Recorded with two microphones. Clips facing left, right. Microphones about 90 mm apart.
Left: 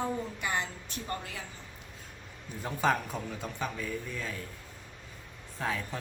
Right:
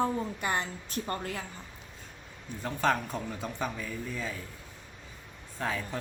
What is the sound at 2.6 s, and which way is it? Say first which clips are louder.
A man's voice: even; 5° left (ahead or behind).